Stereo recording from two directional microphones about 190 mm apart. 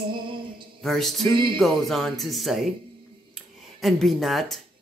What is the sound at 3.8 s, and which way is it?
Speech, centre (ahead or behind).